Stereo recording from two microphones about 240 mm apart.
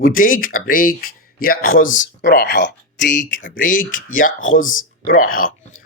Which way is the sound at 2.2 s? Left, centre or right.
Left.